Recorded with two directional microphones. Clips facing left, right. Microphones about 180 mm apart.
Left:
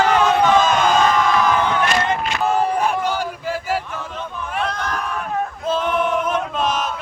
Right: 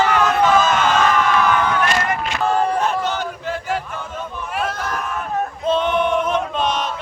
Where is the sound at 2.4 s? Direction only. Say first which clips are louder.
Right 1 dB; 5° left (ahead or behind).